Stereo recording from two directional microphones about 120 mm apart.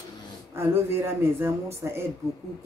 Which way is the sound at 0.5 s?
20° right (ahead or behind).